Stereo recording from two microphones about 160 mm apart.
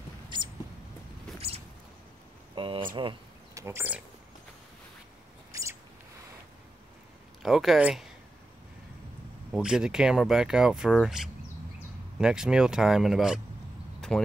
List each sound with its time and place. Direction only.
2.5 s speech: 30° right (ahead or behind)
3.5 s speech: 15° right (ahead or behind)
7.4 s speech: centre (ahead or behind)
9.5 s speech: 5° right (ahead or behind)